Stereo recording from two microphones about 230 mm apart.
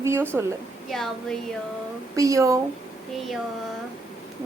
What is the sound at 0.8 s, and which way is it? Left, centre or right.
Speech, centre.